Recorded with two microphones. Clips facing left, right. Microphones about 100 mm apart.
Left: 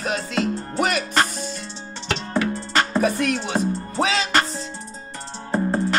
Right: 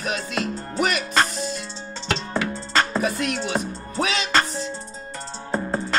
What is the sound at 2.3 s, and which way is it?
Music, 5° left (ahead or behind).